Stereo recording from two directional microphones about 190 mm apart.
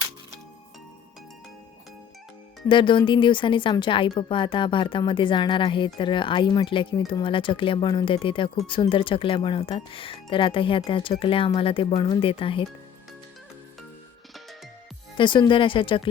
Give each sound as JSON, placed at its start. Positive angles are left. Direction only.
{"t": 2.6, "sound": "a woman's voice", "side_deg": 25}
{"t": 15.2, "sound": "a woman's voice", "side_deg": 25}